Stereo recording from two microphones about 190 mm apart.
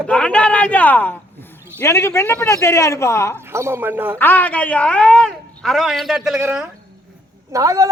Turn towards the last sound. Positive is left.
turn(degrees=-15)  # may be behind; listen again after turning